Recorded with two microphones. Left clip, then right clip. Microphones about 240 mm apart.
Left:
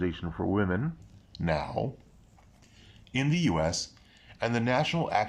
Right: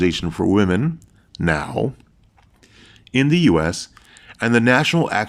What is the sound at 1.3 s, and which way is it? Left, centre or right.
Speech, right.